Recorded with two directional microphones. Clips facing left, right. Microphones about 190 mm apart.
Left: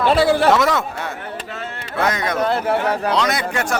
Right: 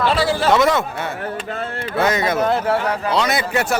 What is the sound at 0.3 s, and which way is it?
Speech, 55° left (ahead or behind).